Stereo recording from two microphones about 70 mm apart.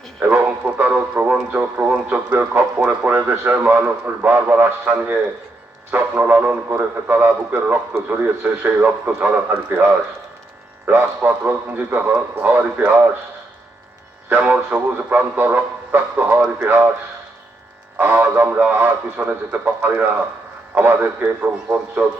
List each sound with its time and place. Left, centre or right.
0.2 s speech: right
14.3 s speech: right
18.0 s a man's voice: right